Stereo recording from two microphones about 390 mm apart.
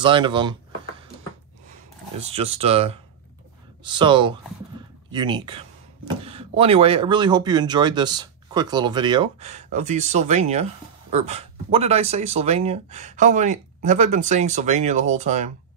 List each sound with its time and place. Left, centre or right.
0.0 s speech: centre
2.1 s speech: centre
4.7 s a sound: centre
5.1 s speech: centre